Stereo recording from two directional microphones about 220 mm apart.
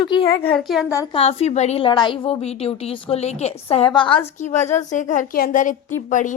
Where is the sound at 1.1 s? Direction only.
25° left (ahead or behind).